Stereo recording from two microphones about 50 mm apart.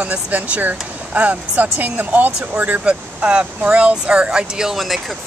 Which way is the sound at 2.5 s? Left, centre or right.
Right.